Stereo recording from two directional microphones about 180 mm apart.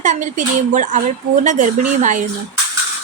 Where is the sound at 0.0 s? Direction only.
45° right (ahead or behind).